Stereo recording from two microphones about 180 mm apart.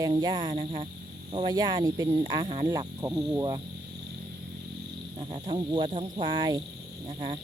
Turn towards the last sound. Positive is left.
turn(degrees=-30)  # may be behind; listen again after turning